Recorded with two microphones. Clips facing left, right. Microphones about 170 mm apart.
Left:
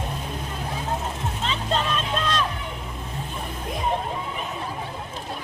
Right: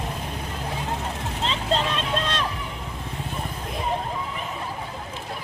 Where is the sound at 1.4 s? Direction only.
30° right (ahead or behind).